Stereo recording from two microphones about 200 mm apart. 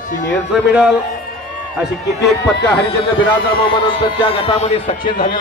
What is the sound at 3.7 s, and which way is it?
A man's voice, 25° left (ahead or behind).